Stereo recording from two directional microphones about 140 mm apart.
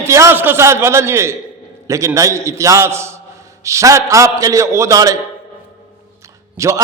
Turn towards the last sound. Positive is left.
turn(degrees=-20)  # may be behind; listen again after turning